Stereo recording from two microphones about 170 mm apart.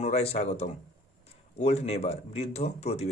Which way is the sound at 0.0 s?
35° left (ahead or behind).